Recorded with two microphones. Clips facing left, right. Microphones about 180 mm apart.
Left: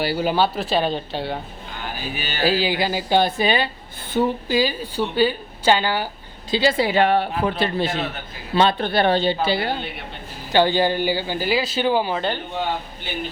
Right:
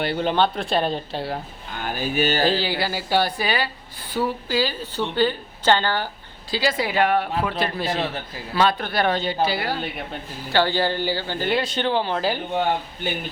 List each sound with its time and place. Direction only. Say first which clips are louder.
0.0 s speech: left 1 dB; 5° left (ahead or behind)
1.8 s speech: right 8 dB; 45° right (ahead or behind)
2.5 s a man's voice: left 3 dB; 15° left (ahead or behind)
6.5 s a man's voice: left 4 dB; 25° left (ahead or behind); by 12.2 s 10° left (ahead or behind)